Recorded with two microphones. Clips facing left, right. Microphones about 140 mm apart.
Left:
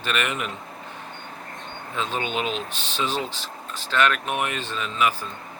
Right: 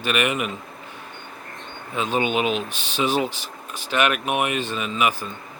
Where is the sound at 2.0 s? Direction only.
15° right (ahead or behind).